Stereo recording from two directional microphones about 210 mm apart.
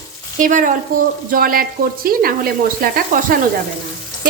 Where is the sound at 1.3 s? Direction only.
45° right (ahead or behind).